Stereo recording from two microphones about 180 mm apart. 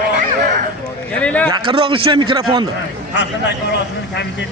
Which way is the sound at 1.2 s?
5° left (ahead or behind).